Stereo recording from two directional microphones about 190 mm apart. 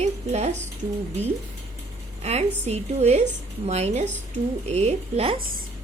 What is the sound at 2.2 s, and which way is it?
A woman's voice, 35° right (ahead or behind).